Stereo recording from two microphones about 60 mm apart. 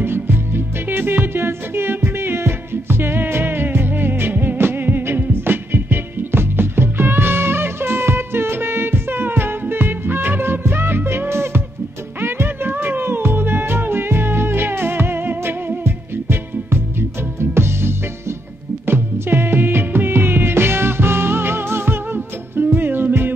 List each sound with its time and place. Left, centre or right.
0.0 s music: right